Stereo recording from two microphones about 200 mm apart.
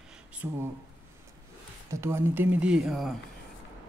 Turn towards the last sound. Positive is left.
turn(degrees=0)  # may be behind; listen again after turning